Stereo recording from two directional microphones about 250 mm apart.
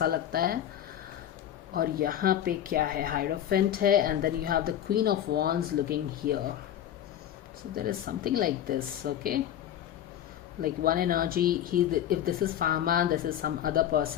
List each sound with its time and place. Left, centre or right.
0.0 s speech: right
1.7 s speech: right
7.8 s speech: right
10.6 s speech: right